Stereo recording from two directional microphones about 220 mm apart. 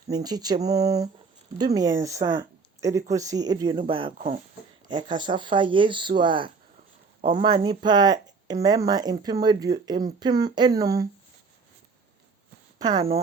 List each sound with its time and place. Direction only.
0.1 s speech: 20° right (ahead or behind)
12.8 s speech: 20° right (ahead or behind)